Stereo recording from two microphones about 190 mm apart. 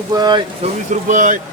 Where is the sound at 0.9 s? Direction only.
40° right (ahead or behind).